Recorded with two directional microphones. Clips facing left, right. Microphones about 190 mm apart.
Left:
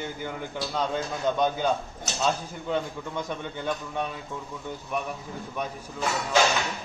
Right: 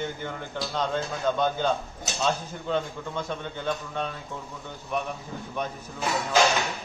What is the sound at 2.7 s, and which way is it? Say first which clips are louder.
A man's voice: right 1 dB; 15° left (ahead or behind).